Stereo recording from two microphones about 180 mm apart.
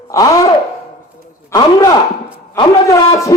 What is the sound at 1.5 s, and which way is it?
A man's voice, 20° left (ahead or behind).